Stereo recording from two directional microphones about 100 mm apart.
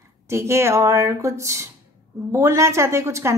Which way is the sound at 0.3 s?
25° right (ahead or behind).